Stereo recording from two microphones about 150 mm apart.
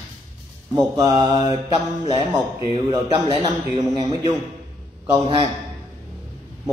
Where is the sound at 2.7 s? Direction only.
30° right (ahead or behind).